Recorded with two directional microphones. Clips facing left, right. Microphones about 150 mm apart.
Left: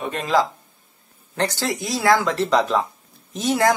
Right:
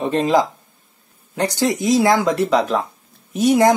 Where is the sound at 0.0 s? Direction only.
25° right (ahead or behind).